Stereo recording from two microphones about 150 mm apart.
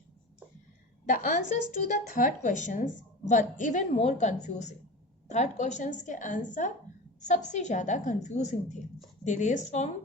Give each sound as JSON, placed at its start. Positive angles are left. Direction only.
{"t": 1.0, "sound": "a woman's voice", "side_deg": 60}